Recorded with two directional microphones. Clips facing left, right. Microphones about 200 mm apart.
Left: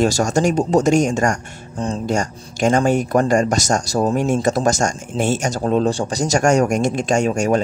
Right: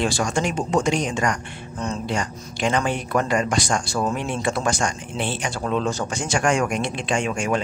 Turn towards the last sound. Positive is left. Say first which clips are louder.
# left 6 dB
turn(degrees=40)  # may be behind; listen again after turning